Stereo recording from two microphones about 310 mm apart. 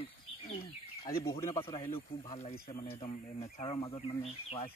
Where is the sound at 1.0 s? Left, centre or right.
Centre.